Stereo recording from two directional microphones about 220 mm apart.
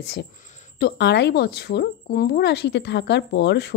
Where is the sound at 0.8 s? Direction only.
50° left (ahead or behind).